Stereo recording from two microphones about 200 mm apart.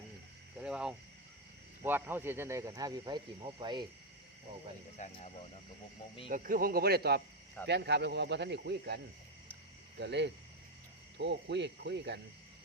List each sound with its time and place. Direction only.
0.6 s a sound: 5° right (ahead or behind)
1.8 s speech: 10° right (ahead or behind)
4.9 s speech: 35° left (ahead or behind)
6.2 s speech: 45° right (ahead or behind)
10.0 s speech: 60° right (ahead or behind)